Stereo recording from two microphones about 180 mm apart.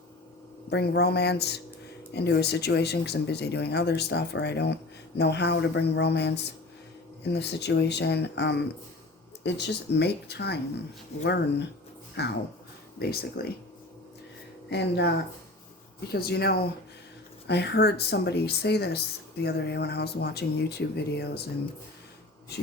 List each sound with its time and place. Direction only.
0.7 s speech: 65° left (ahead or behind)
11.1 s speech: 35° left (ahead or behind)
12.2 s speech: 65° left (ahead or behind)
14.7 s speech: 70° left (ahead or behind)
16.1 s speech: 60° left (ahead or behind)